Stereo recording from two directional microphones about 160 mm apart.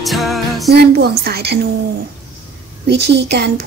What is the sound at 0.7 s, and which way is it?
Speech, 85° right.